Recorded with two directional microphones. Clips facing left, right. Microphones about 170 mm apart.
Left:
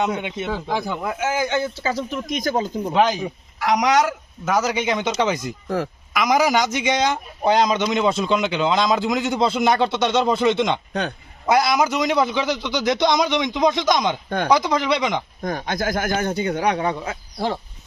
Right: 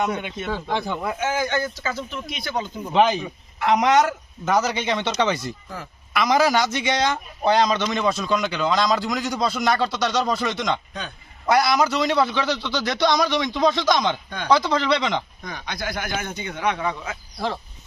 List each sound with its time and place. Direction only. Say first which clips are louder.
0.1 s a man's voice: left 2 dB; 15° left (ahead or behind); by 2.9 s 40° left (ahead or behind)
2.9 s a man's voice: right 1 dB; 5° left (ahead or behind)
5.6 s speech: left 12 dB; 80° left
6.1 s a man's voice: left 1 dB; 15° left (ahead or behind)
14.3 s speech: left 7 dB; 50° left (ahead or behind)
14.5 s a man's voice: even; 15° left (ahead or behind)
15.4 s speech: left 8 dB; 45° left (ahead or behind); by 17.6 s 30° left (ahead or behind)